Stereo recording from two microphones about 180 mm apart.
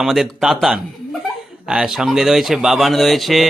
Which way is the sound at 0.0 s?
Centre (ahead or behind).